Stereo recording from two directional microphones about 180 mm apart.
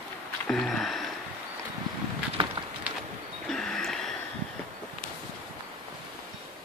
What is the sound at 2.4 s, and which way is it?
Bird, 30° right (ahead or behind).